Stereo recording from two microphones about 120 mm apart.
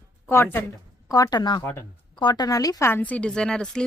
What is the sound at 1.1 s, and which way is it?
Speech, 30° left (ahead or behind).